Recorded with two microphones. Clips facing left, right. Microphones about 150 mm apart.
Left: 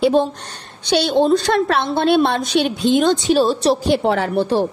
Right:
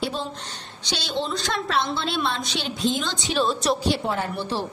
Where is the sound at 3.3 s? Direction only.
35° left (ahead or behind).